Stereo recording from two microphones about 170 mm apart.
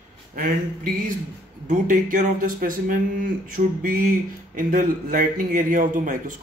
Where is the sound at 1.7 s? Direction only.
50° right (ahead or behind).